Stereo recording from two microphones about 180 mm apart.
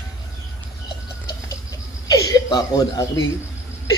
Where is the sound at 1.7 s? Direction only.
20° left (ahead or behind).